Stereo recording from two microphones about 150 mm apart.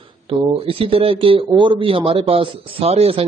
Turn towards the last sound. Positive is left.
turn(degrees=-40)  # may be behind; listen again after turning